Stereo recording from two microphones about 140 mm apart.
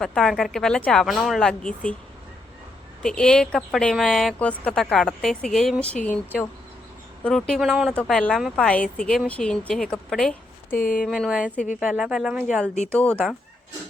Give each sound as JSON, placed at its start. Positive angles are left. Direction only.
{"t": 0.0, "sound": "speech", "side_deg": 5}
{"t": 3.0, "sound": "speech", "side_deg": 5}
{"t": 7.3, "sound": "speech", "side_deg": 5}
{"t": 10.8, "sound": "speech", "side_deg": 80}
{"t": 11.0, "sound": "speech", "side_deg": 0}
{"t": 12.9, "sound": "speech", "side_deg": 5}